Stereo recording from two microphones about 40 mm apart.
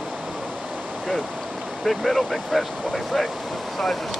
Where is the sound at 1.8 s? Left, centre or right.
Centre.